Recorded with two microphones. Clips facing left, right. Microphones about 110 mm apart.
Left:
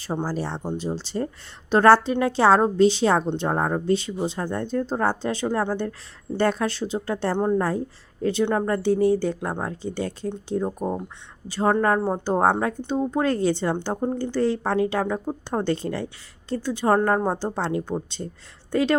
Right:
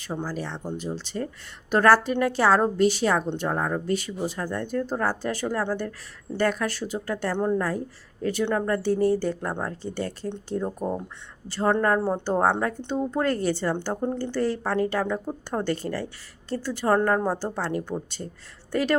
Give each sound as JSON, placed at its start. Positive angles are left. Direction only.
{"t": 0.0, "sound": "a woman's voice", "side_deg": 35}